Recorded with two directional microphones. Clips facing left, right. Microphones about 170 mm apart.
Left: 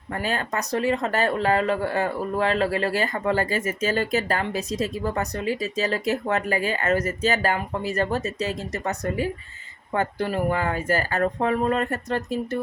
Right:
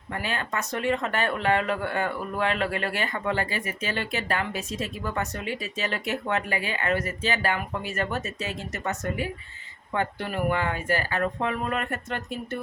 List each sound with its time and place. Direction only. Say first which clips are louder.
0.1 s speech: left 3 dB; 40° left (ahead or behind)